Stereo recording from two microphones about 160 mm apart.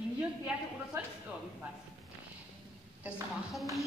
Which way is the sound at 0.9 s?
20° right (ahead or behind).